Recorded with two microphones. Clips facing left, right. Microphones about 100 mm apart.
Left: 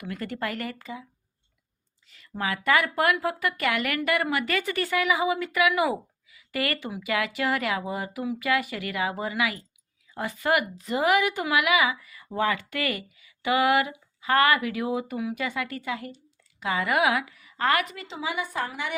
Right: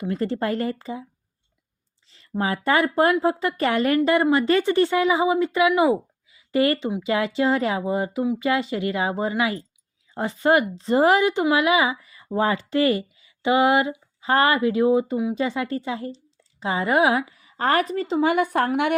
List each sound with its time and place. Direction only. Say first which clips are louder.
0.0 s a woman's voice: right 7 dB; 30° right (ahead or behind)
2.0 s a woman's voice: right 5 dB; 30° right (ahead or behind)
18.2 s a woman's voice: right 9 dB; 55° right (ahead or behind)